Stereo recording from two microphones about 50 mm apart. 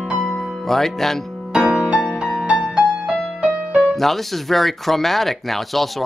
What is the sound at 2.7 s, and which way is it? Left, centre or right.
Music, right.